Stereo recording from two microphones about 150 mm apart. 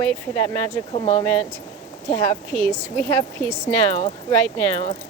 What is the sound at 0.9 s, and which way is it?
Speech, 40° left (ahead or behind).